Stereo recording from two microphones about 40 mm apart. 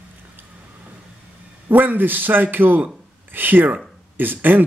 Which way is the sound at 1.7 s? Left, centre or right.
Right.